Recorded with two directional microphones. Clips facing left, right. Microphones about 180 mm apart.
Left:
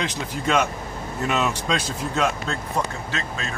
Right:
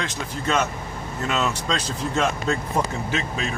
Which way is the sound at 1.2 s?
15° left (ahead or behind).